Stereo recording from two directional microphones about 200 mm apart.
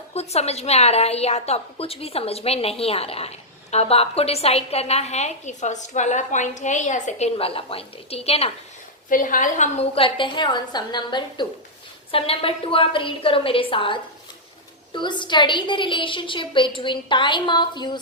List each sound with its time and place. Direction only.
0.1 s a woman's voice: 30° left (ahead or behind)
9.0 s a woman's voice: 40° left (ahead or behind); by 18.0 s 20° left (ahead or behind)